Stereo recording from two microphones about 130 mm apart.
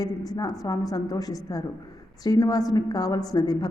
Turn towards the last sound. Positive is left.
turn(degrees=30)  # may be behind; listen again after turning